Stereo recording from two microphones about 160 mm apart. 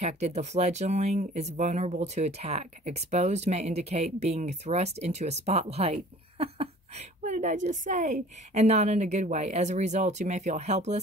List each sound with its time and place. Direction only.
0.0 s speech: 45° right (ahead or behind)
7.2 s speech: 50° right (ahead or behind)